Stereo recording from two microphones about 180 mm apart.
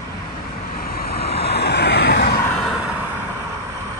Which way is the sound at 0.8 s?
55° left (ahead or behind).